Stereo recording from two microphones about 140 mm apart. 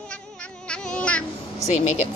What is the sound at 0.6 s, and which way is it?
Insect, 5° left (ahead or behind).